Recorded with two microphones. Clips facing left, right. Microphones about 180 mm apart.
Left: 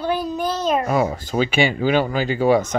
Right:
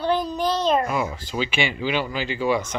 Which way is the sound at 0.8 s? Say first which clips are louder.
Left 6 dB; 40° left (ahead or behind).